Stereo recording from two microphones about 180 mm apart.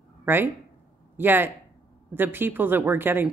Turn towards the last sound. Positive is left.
turn(degrees=-10)  # may be behind; listen again after turning